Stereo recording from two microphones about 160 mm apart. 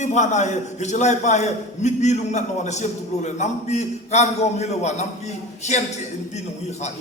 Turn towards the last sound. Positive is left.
turn(degrees=45)  # may be behind; listen again after turning